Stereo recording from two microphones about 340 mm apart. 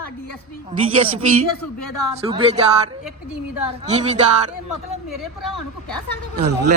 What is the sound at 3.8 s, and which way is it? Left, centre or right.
Speech, centre.